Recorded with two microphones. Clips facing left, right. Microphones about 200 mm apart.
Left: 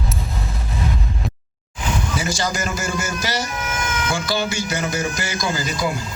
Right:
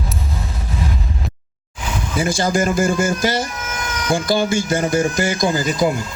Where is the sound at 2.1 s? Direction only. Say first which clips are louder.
Right 10 dB; 55° right (ahead or behind).